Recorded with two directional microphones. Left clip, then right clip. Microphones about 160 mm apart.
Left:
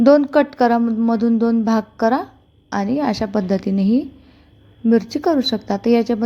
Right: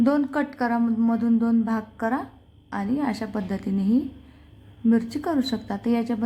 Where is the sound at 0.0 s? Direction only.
35° left (ahead or behind).